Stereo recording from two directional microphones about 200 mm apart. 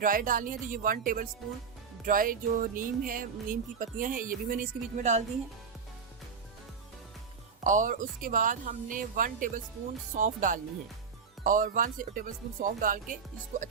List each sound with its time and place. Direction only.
0.0 s speech: 45° right (ahead or behind)
7.6 s speech: 40° right (ahead or behind)